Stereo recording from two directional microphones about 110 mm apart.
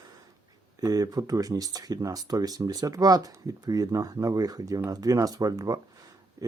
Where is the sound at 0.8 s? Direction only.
35° right (ahead or behind).